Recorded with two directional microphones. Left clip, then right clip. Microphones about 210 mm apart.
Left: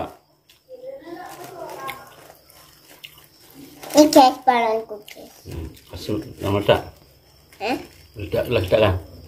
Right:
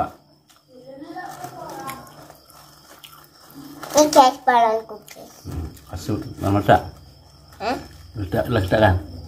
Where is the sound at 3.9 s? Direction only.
20° left (ahead or behind).